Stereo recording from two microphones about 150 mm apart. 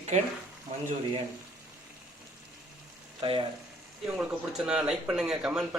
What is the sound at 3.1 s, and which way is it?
Speech, 35° right (ahead or behind).